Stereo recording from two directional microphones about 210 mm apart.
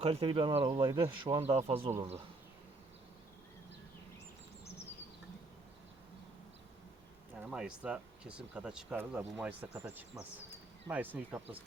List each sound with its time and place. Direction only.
0.0 s speech: 25° right (ahead or behind)
7.5 s speech: 5° right (ahead or behind)